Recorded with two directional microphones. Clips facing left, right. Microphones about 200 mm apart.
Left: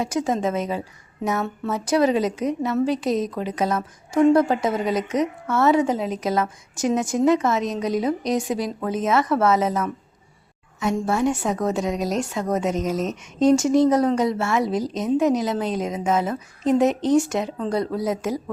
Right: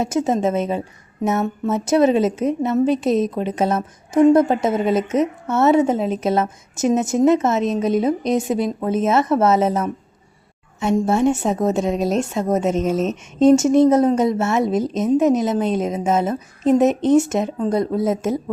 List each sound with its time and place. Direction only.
0.0 s a woman's voice: 25° right (ahead or behind)